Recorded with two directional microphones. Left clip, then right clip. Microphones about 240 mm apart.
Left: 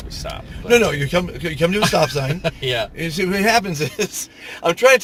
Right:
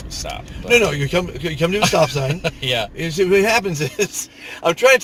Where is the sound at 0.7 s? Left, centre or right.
Left.